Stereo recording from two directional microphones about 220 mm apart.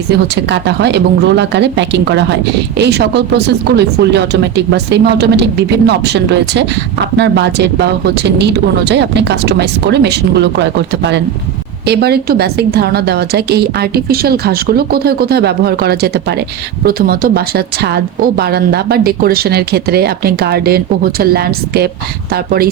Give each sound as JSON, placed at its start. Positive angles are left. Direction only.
{"t": 0.1, "sound": "speech", "side_deg": -50}
{"t": 11.9, "sound": "speech", "side_deg": -45}